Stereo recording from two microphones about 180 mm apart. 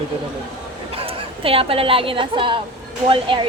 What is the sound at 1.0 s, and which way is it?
A woman's voice, 30° right (ahead or behind).